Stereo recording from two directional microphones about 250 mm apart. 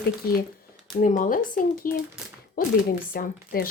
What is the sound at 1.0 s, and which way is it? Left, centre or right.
Speech, left.